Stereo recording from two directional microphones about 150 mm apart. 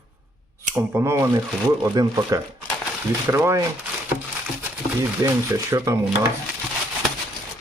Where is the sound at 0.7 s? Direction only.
15° right (ahead or behind).